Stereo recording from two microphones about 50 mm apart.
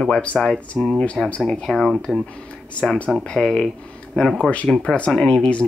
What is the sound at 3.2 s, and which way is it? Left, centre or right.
Speech, centre.